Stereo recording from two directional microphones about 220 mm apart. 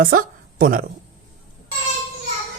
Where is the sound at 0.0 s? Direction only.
40° right (ahead or behind).